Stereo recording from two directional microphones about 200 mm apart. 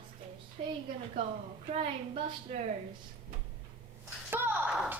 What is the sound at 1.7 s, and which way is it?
Speech, 30° right (ahead or behind).